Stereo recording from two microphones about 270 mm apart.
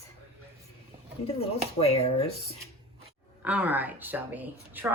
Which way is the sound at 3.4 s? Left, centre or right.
Centre.